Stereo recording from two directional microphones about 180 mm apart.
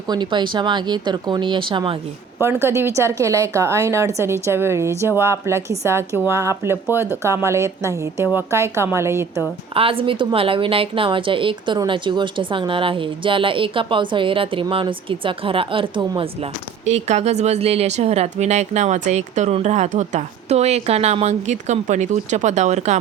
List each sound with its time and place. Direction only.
0.1 s speech: 25° right (ahead or behind)
2.4 s a woman's voice: 15° right (ahead or behind)
9.7 s a woman's voice: 30° right (ahead or behind)